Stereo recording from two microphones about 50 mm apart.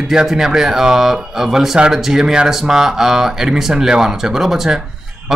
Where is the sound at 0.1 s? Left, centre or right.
Centre.